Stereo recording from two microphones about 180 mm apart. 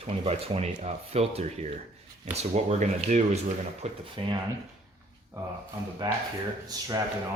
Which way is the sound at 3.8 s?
30° right (ahead or behind).